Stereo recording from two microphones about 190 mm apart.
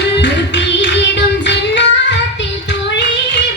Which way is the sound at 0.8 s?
65° left (ahead or behind).